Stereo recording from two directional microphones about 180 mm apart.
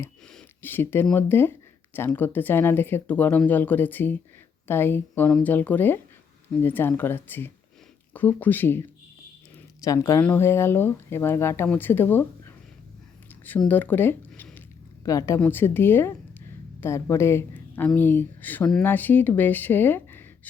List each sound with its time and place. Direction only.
0.3 s speech: 10° left (ahead or behind)
9.8 s speech: 20° left (ahead or behind)
13.7 s speech: 10° left (ahead or behind)